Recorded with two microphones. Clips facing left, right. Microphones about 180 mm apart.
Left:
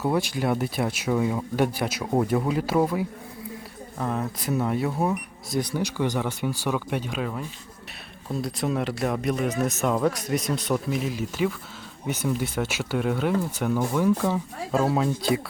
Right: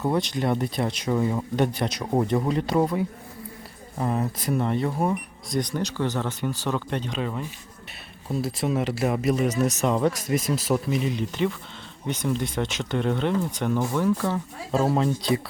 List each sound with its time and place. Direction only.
0.0 s speech: 5° left (ahead or behind)